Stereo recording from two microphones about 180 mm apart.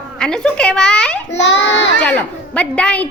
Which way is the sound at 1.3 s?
80° left.